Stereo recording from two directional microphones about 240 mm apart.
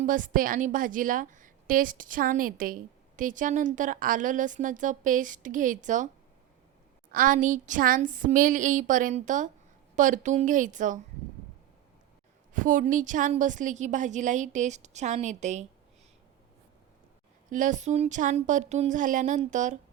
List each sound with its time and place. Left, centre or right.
0.0 s a woman's voice: right
7.1 s a woman's voice: right
12.5 s a woman's voice: right
17.5 s a woman's voice: right